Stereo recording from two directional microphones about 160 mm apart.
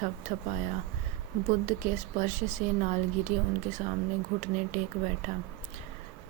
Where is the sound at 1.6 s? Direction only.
50° right (ahead or behind).